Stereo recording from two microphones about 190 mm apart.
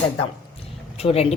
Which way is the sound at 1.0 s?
30° left (ahead or behind).